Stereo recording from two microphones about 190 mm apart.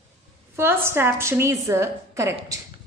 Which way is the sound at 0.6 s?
10° right (ahead or behind).